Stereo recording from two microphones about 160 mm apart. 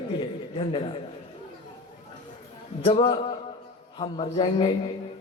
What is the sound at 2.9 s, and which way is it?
A man's voice, 35° left (ahead or behind).